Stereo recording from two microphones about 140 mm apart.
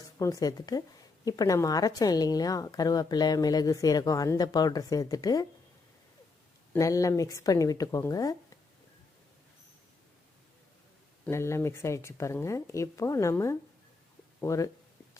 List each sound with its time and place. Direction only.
0.2 s a woman's voice: 25° left (ahead or behind)
6.7 s a woman's voice: 25° left (ahead or behind)
11.3 s a woman's voice: 20° left (ahead or behind)